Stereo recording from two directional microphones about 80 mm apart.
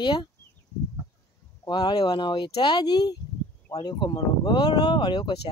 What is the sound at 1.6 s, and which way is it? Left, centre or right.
Speech, left.